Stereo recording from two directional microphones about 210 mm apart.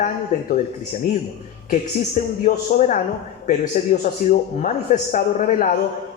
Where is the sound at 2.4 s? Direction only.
35° left (ahead or behind).